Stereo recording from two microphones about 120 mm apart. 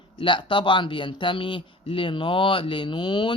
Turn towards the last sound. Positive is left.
turn(degrees=40)  # may be behind; listen again after turning